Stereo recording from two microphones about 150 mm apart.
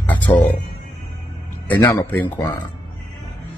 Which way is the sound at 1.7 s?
15° left (ahead or behind).